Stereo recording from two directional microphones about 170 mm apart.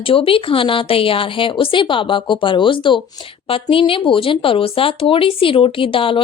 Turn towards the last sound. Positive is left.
turn(degrees=30)  # may be behind; listen again after turning